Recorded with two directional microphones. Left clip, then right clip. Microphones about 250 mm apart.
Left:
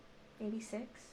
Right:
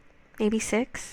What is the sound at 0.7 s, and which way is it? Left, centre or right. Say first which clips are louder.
Speech: right 19 dB; right.